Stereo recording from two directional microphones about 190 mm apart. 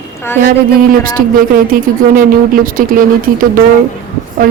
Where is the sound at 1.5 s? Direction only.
45° right (ahead or behind).